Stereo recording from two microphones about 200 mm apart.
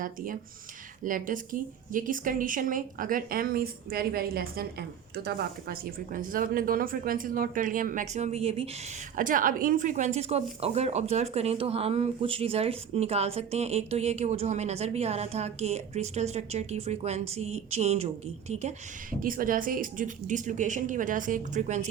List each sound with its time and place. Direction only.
1.0 s a woman's voice: 40° right (ahead or behind)
9.1 s speech: 40° right (ahead or behind)
19.2 s speech: 45° right (ahead or behind)